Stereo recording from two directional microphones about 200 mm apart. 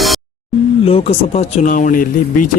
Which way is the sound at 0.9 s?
30° left (ahead or behind).